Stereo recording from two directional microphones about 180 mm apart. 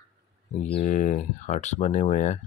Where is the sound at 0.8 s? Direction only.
45° left (ahead or behind).